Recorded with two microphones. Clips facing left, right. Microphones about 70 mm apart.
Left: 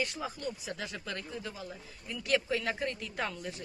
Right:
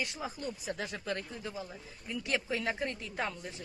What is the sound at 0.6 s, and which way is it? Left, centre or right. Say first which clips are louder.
Speech: right 2 dB; right.